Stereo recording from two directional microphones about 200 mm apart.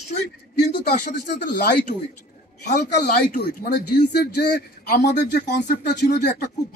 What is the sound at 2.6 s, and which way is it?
Speech, 55° left (ahead or behind).